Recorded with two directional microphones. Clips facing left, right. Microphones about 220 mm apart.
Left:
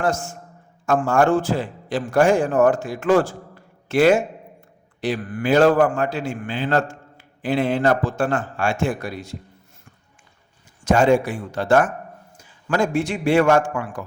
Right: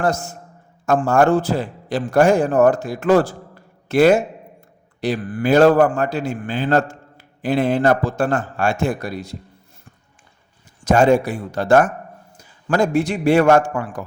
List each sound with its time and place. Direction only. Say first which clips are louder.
0.0 s a man's voice: right 2 dB; 40° right (ahead or behind)
10.8 s a man's voice: right 2 dB; 40° right (ahead or behind)